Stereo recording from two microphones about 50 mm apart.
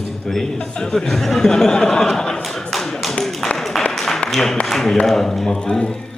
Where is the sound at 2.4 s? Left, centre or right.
Centre.